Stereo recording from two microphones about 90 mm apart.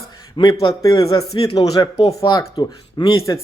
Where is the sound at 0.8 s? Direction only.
45° left (ahead or behind).